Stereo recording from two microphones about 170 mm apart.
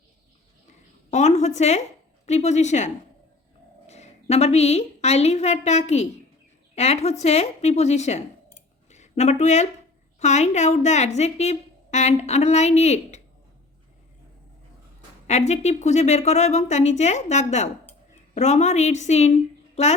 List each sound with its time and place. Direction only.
1.1 s a woman's voice: 40° left (ahead or behind)
8.9 s a sound: 40° left (ahead or behind)
10.2 s a woman's voice: 40° left (ahead or behind)
15.3 s a woman's voice: 40° left (ahead or behind)